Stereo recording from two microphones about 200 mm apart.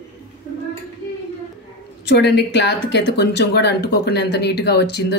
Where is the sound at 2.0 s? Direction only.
55° left (ahead or behind).